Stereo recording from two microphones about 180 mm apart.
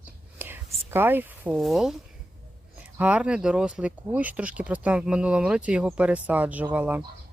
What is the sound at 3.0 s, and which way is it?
Speech, 5° right (ahead or behind).